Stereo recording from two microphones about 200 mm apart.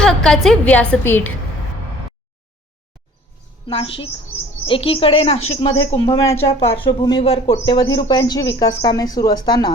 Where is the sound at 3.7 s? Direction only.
25° left (ahead or behind).